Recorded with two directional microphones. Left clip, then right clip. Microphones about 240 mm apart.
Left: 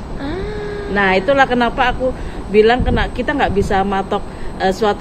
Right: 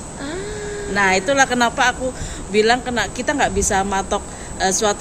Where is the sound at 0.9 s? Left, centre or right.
Centre.